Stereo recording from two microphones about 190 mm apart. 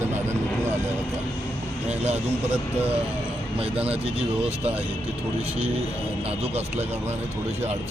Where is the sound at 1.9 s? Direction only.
35° right (ahead or behind).